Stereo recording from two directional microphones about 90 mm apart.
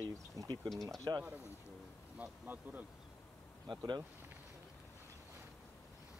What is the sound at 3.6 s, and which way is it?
Speech, 50° right (ahead or behind).